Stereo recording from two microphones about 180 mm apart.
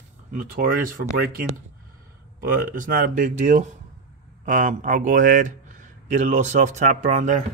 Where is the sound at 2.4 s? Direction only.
50° right (ahead or behind).